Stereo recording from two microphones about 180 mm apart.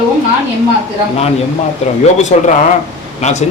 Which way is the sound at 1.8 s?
35° left (ahead or behind).